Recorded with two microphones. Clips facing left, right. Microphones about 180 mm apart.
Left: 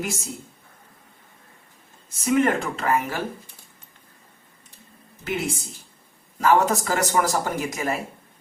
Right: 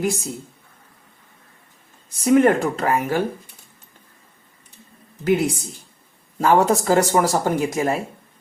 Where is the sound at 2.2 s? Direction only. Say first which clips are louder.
Right 6 dB; 35° right (ahead or behind).